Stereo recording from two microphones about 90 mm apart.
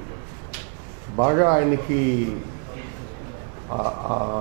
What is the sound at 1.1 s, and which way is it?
Speech, 20° right (ahead or behind).